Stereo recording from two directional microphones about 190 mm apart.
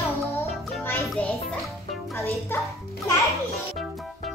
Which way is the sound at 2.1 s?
15° left (ahead or behind).